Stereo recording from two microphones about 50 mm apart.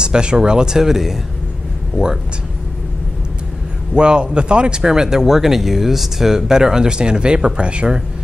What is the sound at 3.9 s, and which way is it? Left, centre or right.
Speech, centre.